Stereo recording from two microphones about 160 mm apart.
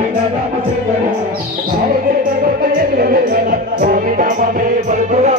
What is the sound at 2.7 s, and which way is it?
Music, 65° right (ahead or behind).